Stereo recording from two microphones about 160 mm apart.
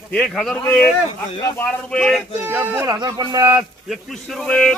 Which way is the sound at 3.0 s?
25° right (ahead or behind).